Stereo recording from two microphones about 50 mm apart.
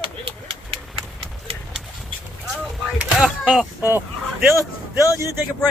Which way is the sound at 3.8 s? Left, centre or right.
Right.